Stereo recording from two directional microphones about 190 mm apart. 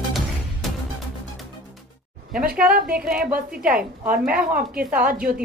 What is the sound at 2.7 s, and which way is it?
A woman's voice, 50° right (ahead or behind).